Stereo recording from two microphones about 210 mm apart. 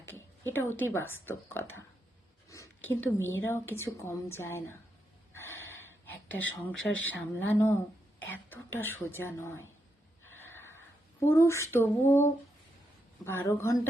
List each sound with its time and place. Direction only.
0.0 s a sound: 10° left (ahead or behind)
0.7 s a woman's voice: 10° left (ahead or behind)
2.5 s a sound: 15° left (ahead or behind)
3.3 s a woman's voice: 10° left (ahead or behind)
5.3 s gasp: 10° left (ahead or behind)
8.3 s a woman's voice: 10° left (ahead or behind)
10.2 s a sound: 10° left (ahead or behind)
11.2 s a woman's voice: 10° left (ahead or behind)
13.2 s a woman's voice: 10° left (ahead or behind)